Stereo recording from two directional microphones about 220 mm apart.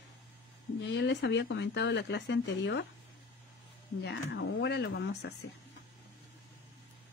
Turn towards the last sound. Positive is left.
turn(degrees=50)  # may be behind; listen again after turning